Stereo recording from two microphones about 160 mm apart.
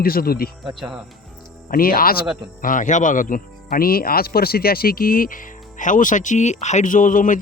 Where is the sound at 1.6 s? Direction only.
65° left (ahead or behind).